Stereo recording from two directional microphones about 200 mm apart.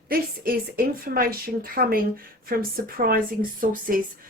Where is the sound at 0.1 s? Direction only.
45° right (ahead or behind).